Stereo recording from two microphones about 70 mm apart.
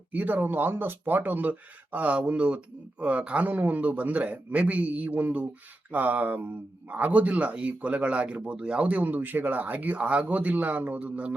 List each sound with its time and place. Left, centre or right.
0.1 s speech: right